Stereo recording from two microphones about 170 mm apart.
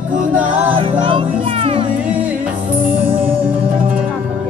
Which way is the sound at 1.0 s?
30° right (ahead or behind).